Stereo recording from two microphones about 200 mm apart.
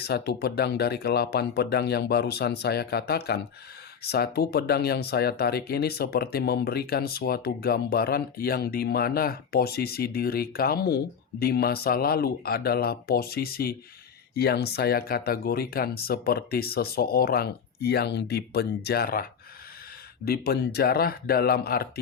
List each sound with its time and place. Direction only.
0.0 s speech: 55° left (ahead or behind)